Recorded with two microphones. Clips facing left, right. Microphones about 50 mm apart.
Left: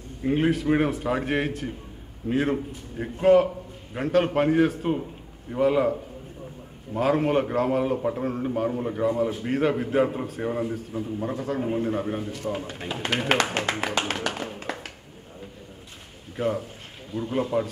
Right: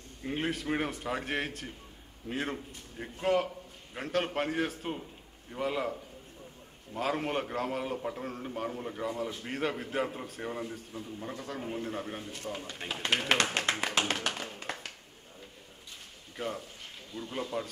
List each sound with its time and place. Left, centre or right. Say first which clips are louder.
0.2 s a man's voice: left 11 dB; centre
7.0 s a man's voice: left 10 dB; centre
13.1 s a man's voice: left 5 dB; centre
14.3 s a sound: left 7 dB; centre
16.3 s a man's voice: left 10 dB; centre